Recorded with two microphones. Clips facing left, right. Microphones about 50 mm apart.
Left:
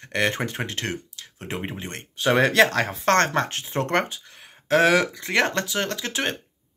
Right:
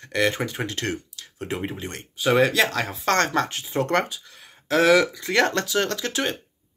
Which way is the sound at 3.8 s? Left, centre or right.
Left.